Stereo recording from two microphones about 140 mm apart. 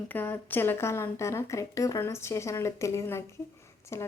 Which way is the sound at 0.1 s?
15° left (ahead or behind).